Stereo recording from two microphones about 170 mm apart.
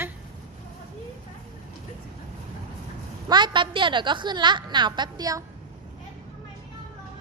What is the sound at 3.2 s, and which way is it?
A woman's voice, 25° right (ahead or behind).